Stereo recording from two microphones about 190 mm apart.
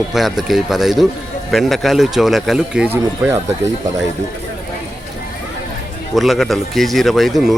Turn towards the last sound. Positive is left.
turn(degrees=0)  # may be behind; listen again after turning